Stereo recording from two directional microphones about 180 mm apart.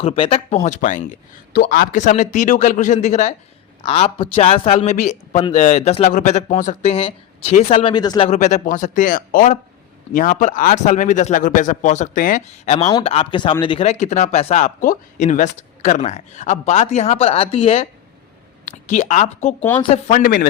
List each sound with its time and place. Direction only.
0.0 s speech: 30° left (ahead or behind)
8.3 s speech: 40° left (ahead or behind)
18.6 s speech: 45° left (ahead or behind)